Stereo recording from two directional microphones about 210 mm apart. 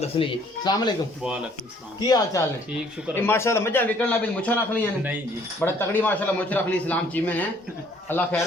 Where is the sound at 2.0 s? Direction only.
20° left (ahead or behind).